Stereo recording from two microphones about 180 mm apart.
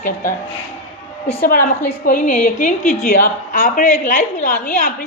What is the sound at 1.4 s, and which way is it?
A woman's voice, 50° left (ahead or behind).